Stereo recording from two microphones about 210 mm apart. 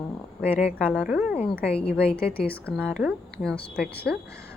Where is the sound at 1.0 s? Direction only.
5° right (ahead or behind).